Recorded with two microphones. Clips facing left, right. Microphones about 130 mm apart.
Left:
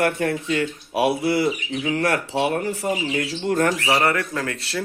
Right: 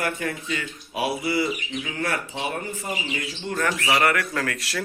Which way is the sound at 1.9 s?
75° left (ahead or behind).